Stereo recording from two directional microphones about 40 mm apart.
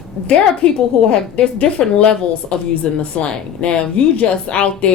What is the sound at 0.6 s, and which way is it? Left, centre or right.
A woman's voice, left.